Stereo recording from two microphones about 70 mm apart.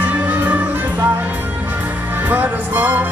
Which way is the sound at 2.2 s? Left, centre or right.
Right.